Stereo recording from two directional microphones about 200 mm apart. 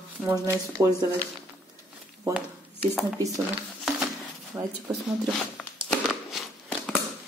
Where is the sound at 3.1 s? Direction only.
15° right (ahead or behind).